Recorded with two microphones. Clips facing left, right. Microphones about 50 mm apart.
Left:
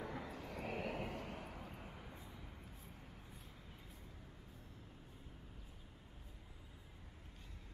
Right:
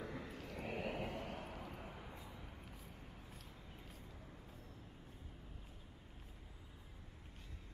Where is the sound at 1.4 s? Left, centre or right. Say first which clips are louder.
Right 2 dB; centre.